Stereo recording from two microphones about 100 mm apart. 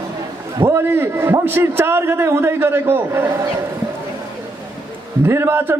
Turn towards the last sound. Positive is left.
turn(degrees=-25)  # may be behind; listen again after turning